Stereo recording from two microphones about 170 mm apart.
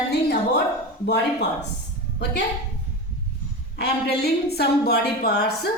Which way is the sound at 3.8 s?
70° left (ahead or behind).